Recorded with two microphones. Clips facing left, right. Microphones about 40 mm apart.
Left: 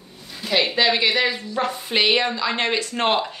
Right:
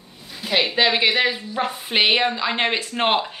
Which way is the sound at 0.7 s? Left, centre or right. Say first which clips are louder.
Right 2 dB; centre.